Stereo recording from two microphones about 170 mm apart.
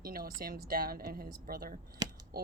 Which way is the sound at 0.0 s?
60° right (ahead or behind).